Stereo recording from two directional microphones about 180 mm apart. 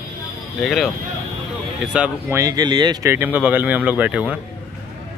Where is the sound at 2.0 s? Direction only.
15° right (ahead or behind).